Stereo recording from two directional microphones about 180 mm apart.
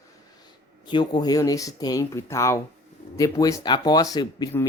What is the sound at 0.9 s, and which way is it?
Speech, 25° left (ahead or behind).